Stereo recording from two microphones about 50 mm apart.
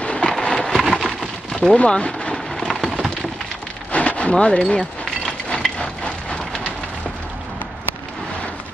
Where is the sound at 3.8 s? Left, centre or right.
Left.